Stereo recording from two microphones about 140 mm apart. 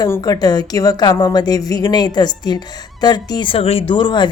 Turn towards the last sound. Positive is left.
turn(degrees=35)  # may be behind; listen again after turning